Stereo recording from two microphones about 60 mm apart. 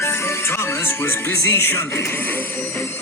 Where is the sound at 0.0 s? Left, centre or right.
Left.